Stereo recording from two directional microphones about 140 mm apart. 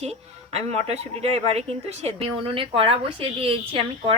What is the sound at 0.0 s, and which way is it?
Speech, 50° right (ahead or behind).